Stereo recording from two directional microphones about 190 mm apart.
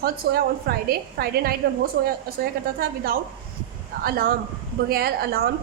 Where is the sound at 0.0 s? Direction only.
50° right (ahead or behind).